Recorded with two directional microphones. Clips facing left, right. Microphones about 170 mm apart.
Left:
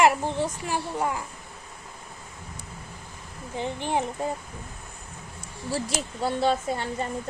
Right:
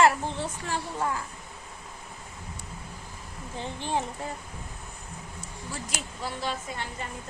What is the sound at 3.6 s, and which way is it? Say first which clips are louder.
Speech: left 4 dB; 15° left (ahead or behind).